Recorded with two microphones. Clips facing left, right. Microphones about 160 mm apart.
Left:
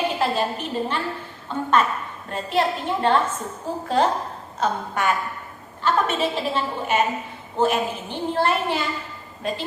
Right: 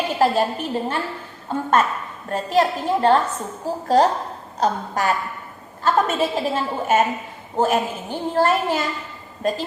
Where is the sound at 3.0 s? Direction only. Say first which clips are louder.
Right 2 dB; 40° right (ahead or behind).